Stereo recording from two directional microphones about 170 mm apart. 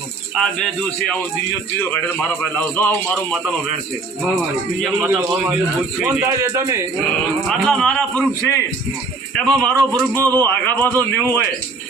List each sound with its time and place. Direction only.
0.3 s speech: 5° left (ahead or behind)
2.4 s speech: 10° left (ahead or behind)
5.0 s a man's voice: 10° right (ahead or behind)
7.4 s speech: centre (ahead or behind)
8.4 s speech: 15° left (ahead or behind)
9.3 s speech: 5° left (ahead or behind)